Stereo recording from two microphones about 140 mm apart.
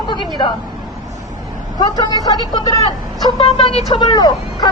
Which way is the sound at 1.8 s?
30° left (ahead or behind).